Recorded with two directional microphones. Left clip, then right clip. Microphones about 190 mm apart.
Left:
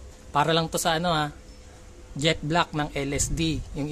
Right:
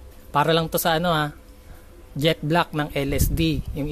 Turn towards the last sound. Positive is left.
turn(degrees=-20)  # may be behind; listen again after turning